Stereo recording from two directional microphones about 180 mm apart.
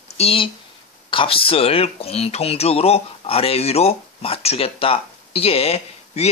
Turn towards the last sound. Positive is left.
turn(degrees=35)  # may be behind; listen again after turning